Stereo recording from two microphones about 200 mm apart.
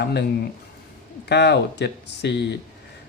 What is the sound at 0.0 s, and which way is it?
Speech, 55° left (ahead or behind).